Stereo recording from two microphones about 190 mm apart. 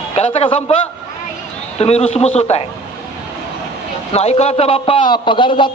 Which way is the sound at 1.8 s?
35° left (ahead or behind).